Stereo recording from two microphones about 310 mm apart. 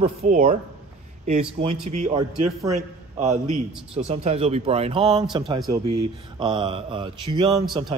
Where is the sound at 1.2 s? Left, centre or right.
Right.